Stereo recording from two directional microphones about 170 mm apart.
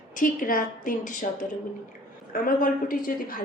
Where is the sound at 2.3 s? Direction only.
55° left (ahead or behind).